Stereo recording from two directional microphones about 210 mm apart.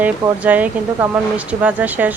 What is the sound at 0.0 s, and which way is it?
Speech, 5° right (ahead or behind).